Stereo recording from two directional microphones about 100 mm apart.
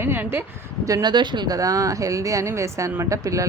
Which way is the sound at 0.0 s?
20° right (ahead or behind).